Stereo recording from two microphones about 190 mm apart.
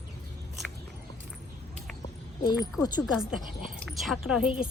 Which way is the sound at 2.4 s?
20° left (ahead or behind).